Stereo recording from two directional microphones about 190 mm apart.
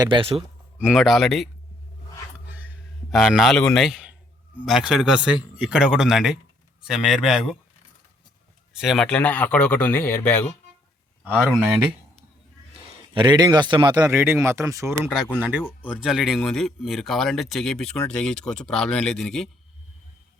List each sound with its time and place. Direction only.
0.0 s speech: 25° right (ahead or behind)
0.8 s speech: 5° right (ahead or behind)
2.5 s a sound: 10° right (ahead or behind)
4.5 s speech: 5° right (ahead or behind)
8.7 s speech: centre (ahead or behind)
11.3 s speech: centre (ahead or behind)
13.1 s speech: 20° right (ahead or behind); by 19.5 s centre (ahead or behind)